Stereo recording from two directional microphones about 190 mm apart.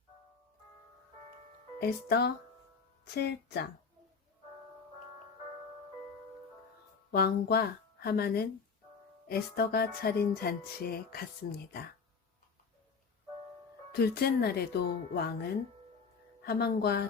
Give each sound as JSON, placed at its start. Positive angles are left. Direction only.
{"t": 1.8, "sound": "speech", "side_deg": 55}
{"t": 7.1, "sound": "a woman's voice", "side_deg": 55}
{"t": 9.3, "sound": "music", "side_deg": 55}
{"t": 13.9, "sound": "speech", "side_deg": 55}